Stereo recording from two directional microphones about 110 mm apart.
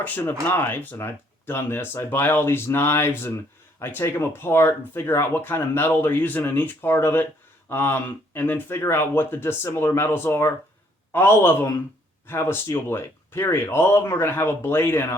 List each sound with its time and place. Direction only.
0.0 s speech: 15° left (ahead or behind)